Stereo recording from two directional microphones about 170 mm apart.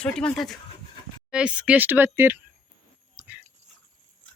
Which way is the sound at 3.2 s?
5° right (ahead or behind).